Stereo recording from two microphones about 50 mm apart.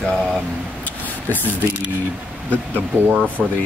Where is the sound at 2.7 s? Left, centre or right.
Right.